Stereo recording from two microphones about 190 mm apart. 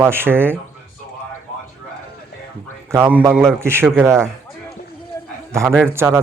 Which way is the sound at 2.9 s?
10° right (ahead or behind).